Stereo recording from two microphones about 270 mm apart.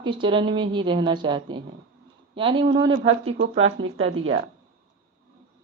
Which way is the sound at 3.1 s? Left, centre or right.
Right.